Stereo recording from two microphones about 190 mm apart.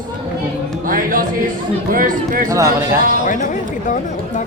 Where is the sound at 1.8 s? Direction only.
45° right (ahead or behind).